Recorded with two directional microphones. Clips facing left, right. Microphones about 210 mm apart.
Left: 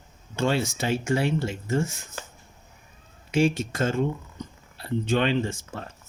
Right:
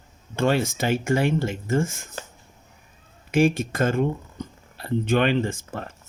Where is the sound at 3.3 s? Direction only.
50° right (ahead or behind).